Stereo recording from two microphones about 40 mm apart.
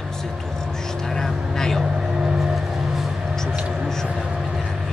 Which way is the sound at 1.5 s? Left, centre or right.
Centre.